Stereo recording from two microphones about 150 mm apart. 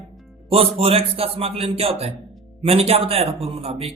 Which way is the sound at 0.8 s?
40° right (ahead or behind).